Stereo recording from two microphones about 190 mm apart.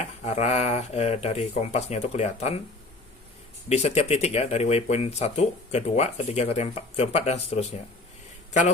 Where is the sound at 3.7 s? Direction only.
35° left (ahead or behind).